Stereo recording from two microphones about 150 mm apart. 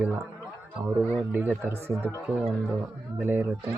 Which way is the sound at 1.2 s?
10° right (ahead or behind).